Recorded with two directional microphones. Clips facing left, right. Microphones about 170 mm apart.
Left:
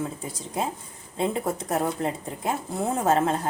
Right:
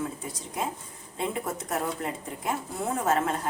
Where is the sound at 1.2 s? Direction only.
30° left (ahead or behind).